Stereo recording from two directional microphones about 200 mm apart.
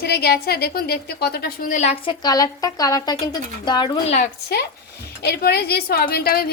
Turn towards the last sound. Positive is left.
turn(degrees=50)  # may be behind; listen again after turning